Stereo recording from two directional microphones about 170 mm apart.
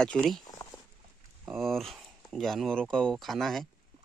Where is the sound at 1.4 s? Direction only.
Centre (ahead or behind).